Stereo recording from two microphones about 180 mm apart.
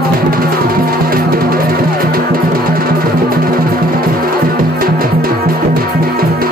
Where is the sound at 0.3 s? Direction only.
55° right (ahead or behind).